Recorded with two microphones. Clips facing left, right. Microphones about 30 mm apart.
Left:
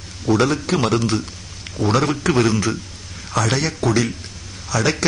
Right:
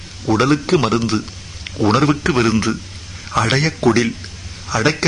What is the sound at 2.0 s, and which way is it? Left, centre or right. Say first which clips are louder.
Speech: right 2 dB; centre.